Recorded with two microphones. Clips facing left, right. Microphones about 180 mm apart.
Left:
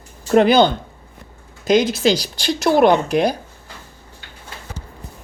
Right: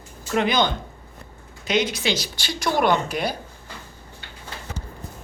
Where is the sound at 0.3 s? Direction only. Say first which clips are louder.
Left 9 dB; 35° left (ahead or behind).